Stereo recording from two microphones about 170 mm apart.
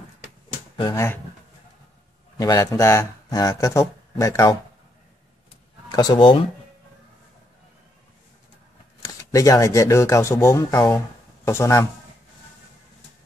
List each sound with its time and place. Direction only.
0.9 s speech: 15° left (ahead or behind)
2.3 s speech: 20° left (ahead or behind)
5.9 s speech: 25° left (ahead or behind)
9.0 s speech: 20° left (ahead or behind)